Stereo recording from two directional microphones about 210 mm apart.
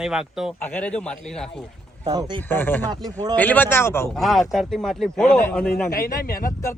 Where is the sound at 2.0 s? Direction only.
20° right (ahead or behind).